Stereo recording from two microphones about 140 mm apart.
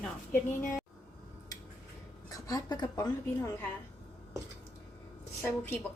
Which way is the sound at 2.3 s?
25° left (ahead or behind).